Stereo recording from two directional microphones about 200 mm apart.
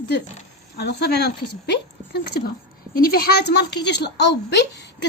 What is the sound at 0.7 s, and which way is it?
A woman's voice, 55° left (ahead or behind).